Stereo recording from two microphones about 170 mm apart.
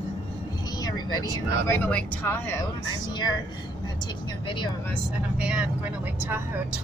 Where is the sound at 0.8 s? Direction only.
25° left (ahead or behind).